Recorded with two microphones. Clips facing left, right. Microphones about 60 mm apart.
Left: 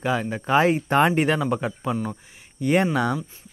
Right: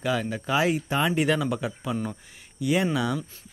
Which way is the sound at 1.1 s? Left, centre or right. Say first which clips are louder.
Left 3 dB; left.